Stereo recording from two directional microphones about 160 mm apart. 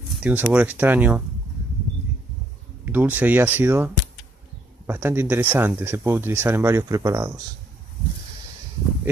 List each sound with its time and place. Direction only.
0.2 s speech: 10° right (ahead or behind)
2.8 s speech: 10° right (ahead or behind)